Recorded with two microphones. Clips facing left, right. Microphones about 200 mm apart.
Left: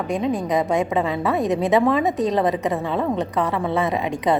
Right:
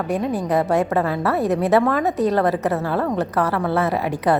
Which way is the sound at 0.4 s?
15° left (ahead or behind).